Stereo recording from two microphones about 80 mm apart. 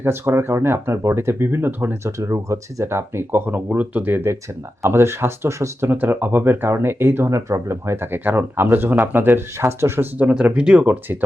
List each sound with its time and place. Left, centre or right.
0.0 s speech: right
2.1 s speech: right
5.9 s speech: right
10.2 s speech: centre